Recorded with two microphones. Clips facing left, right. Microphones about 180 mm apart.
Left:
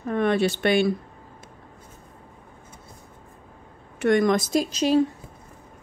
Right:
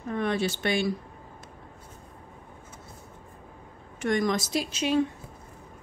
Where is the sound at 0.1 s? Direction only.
60° left (ahead or behind).